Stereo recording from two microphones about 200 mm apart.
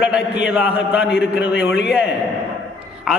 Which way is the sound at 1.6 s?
55° left (ahead or behind).